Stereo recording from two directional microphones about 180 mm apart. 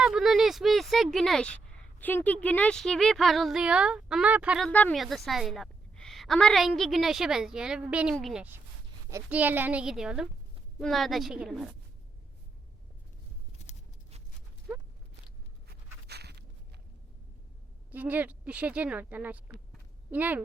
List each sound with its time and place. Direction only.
0.0 s a woman's voice: centre (ahead or behind)
4.7 s a woman's voice: 5° left (ahead or behind)
15.7 s writing: 65° right (ahead or behind)
17.9 s speech: 10° right (ahead or behind)